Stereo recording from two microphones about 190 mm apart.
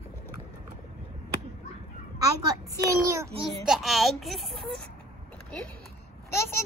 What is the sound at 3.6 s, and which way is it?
Speech, centre (ahead or behind).